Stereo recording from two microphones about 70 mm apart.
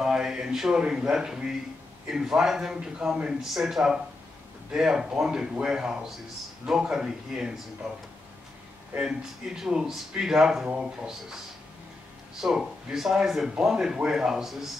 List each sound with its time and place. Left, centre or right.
0.0 s speech: centre
8.9 s speech: right
12.4 s speech: centre